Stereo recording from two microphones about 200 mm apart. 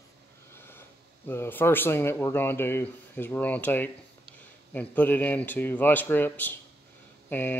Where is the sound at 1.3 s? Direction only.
10° left (ahead or behind).